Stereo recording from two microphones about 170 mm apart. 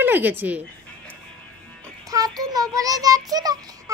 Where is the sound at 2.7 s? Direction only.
20° right (ahead or behind).